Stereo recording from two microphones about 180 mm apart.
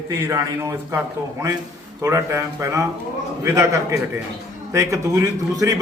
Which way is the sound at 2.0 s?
15° right (ahead or behind).